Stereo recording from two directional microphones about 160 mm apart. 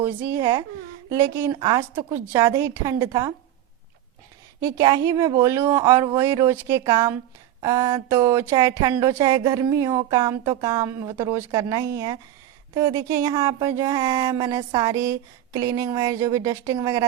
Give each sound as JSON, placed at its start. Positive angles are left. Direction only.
{"t": 0.0, "sound": "speech", "side_deg": -10}
{"t": 1.5, "sound": "speech", "side_deg": -25}
{"t": 1.8, "sound": "speech", "side_deg": -15}
{"t": 4.6, "sound": "speech", "side_deg": -20}